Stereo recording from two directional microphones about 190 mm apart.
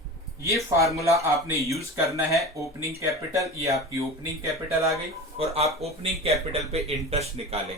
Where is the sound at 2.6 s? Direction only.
15° right (ahead or behind).